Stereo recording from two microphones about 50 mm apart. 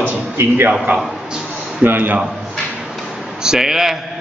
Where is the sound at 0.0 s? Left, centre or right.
Right.